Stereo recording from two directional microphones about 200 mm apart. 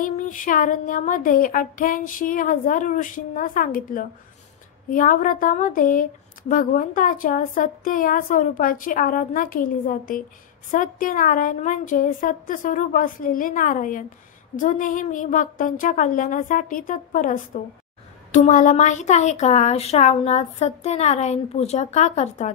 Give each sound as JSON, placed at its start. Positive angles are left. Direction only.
{"t": 0.0, "sound": "a woman's voice", "side_deg": 40}